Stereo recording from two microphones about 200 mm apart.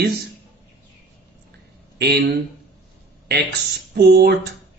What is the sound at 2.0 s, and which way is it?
Speech, 55° right (ahead or behind).